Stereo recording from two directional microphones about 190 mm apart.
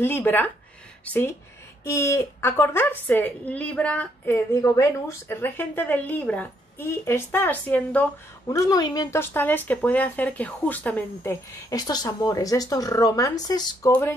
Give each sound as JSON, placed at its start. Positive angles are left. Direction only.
{"t": 0.0, "sound": "a woman's voice", "side_deg": 10}
{"t": 1.9, "sound": "a woman's voice", "side_deg": 15}
{"t": 11.7, "sound": "speech", "side_deg": 20}